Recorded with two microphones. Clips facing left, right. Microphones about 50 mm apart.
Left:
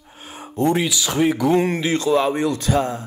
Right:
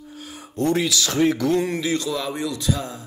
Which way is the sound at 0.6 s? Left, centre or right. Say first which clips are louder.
Left 2 dB; left.